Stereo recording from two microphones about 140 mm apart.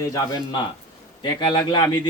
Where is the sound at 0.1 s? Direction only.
25° left (ahead or behind).